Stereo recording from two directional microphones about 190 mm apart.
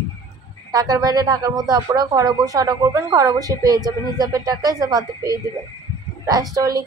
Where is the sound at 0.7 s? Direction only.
20° right (ahead or behind).